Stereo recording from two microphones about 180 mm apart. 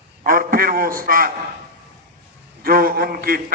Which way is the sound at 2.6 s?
55° right (ahead or behind).